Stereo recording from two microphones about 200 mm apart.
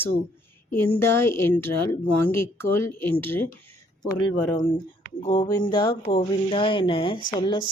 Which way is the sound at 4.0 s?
20° left (ahead or behind).